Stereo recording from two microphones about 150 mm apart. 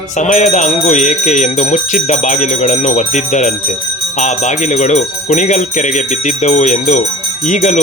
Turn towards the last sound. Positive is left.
turn(degrees=50)  # may be behind; listen again after turning